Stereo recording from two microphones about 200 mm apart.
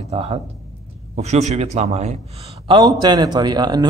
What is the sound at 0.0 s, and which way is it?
A man's voice, 30° right (ahead or behind).